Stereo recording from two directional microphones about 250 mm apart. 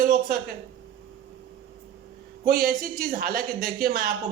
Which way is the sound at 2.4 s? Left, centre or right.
Right.